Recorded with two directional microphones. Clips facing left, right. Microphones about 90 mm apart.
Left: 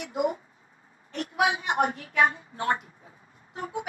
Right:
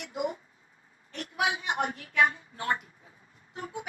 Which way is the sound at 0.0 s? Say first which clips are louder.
Left 5 dB; 35° left (ahead or behind).